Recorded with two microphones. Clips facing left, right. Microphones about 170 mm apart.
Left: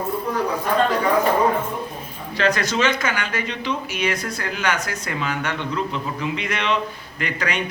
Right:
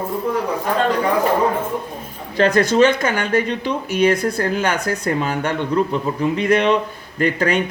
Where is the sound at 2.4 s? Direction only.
55° right (ahead or behind).